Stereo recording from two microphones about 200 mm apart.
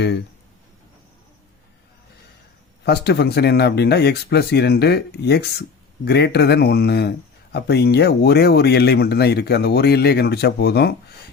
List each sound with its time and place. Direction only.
2.8 s speech: 55° left (ahead or behind)